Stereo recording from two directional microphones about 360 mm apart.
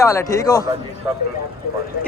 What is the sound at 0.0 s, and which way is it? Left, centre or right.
Speech, centre.